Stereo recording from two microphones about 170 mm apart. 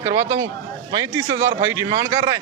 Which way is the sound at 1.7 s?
20° right (ahead or behind).